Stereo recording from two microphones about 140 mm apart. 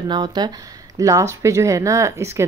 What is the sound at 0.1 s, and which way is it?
Speech, 30° right (ahead or behind).